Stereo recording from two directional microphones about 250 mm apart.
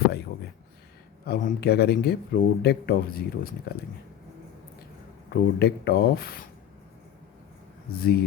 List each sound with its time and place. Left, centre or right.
1.2 s speech: left
5.3 s speech: left
7.9 s speech: left